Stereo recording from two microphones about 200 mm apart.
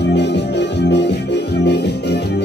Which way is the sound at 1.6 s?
55° left (ahead or behind).